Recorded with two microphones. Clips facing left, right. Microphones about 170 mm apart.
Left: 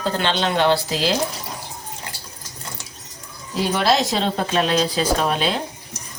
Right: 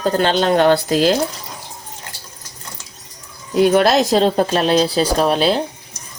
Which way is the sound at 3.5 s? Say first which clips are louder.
Right 7 dB; 55° right (ahead or behind).